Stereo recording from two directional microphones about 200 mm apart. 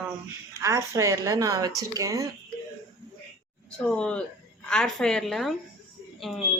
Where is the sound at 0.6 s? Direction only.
15° right (ahead or behind).